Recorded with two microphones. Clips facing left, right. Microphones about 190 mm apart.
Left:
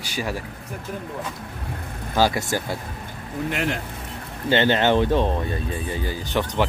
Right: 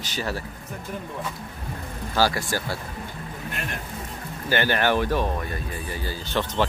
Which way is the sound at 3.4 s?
90° left.